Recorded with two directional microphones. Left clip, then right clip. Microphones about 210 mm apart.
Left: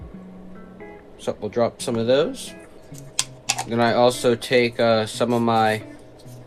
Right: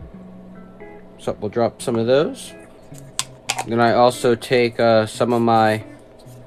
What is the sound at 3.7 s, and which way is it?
Speech, 50° right (ahead or behind).